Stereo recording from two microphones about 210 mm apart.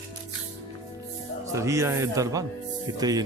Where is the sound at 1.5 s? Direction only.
15° right (ahead or behind).